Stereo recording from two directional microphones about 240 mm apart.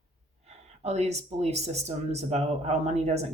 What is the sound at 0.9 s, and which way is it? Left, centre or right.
Speech, right.